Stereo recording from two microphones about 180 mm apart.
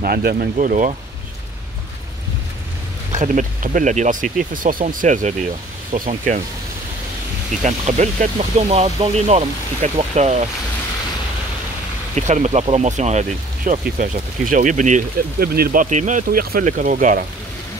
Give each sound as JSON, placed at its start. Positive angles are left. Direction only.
{"t": 0.0, "sound": "speech", "side_deg": -60}
{"t": 0.6, "sound": "speech", "side_deg": -45}
{"t": 3.1, "sound": "speech", "side_deg": -45}
{"t": 7.6, "sound": "speech", "side_deg": -40}
{"t": 12.2, "sound": "speech", "side_deg": -40}